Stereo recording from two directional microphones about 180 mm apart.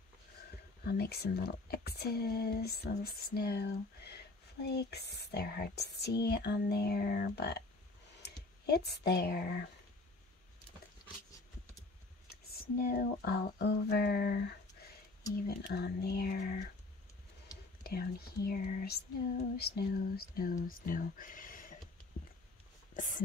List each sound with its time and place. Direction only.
0.8 s speech: 65° left (ahead or behind)
12.8 s speech: 55° left (ahead or behind)
16.3 s speech: 45° left (ahead or behind)
17.8 s speech: 55° left (ahead or behind)
22.9 s speech: 45° left (ahead or behind)